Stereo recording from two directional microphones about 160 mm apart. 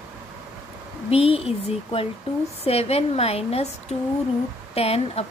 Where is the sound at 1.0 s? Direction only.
40° left (ahead or behind).